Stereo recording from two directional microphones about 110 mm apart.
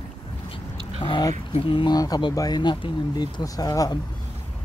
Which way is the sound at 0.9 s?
45° left (ahead or behind).